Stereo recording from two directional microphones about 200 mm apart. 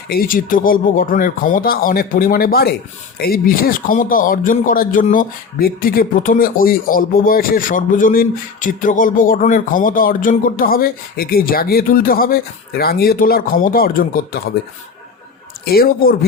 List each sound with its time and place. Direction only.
0.1 s a man's voice: 45° left (ahead or behind)
15.6 s a man's voice: 50° left (ahead or behind)